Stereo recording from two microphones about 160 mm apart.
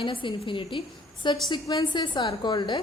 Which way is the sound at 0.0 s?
30° left (ahead or behind).